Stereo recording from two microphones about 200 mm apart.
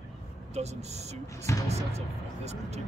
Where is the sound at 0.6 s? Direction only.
35° right (ahead or behind).